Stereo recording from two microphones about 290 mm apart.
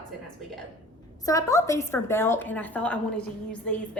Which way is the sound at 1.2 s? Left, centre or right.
Centre.